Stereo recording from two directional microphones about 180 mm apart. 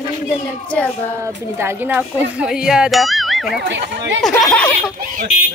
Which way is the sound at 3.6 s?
90° right.